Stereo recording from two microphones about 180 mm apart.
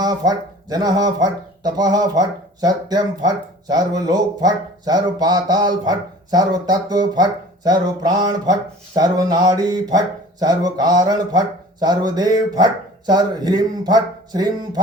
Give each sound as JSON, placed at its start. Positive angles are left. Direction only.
{"t": 0.0, "sound": "speech", "side_deg": -20}